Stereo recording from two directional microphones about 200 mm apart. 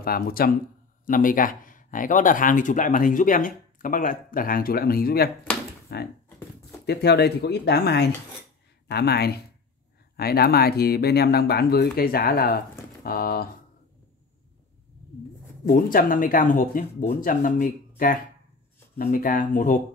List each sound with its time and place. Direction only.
0.0 s speech: 50° left (ahead or behind)
15.6 s speech: 45° left (ahead or behind)